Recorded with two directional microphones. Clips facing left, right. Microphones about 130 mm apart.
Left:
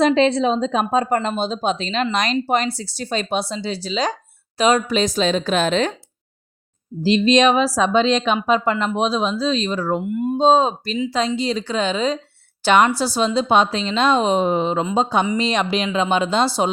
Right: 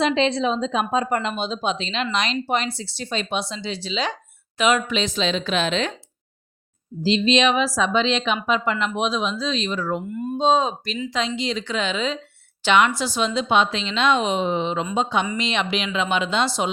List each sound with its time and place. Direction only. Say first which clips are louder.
0.0 s speech: left 4 dB; 40° left (ahead or behind)
7.0 s speech: left 4 dB; 45° left (ahead or behind)
10.1 s speech: left 6 dB; 15° left (ahead or behind)
10.3 s speech: left 4 dB; 35° left (ahead or behind)